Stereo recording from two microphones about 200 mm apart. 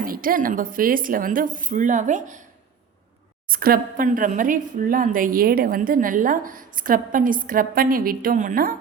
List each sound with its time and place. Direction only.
0.0 s a woman's voice: 45° right (ahead or behind)
3.5 s a woman's voice: 45° right (ahead or behind)